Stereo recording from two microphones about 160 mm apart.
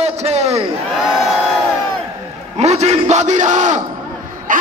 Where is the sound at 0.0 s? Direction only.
40° right (ahead or behind).